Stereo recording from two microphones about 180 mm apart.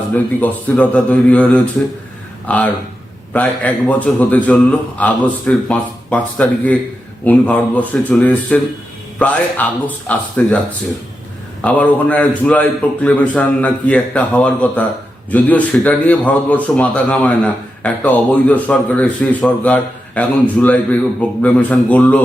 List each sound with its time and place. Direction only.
0.1 s a man's voice: 10° left (ahead or behind)